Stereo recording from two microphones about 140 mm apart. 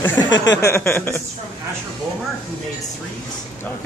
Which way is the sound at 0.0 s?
20° left (ahead or behind).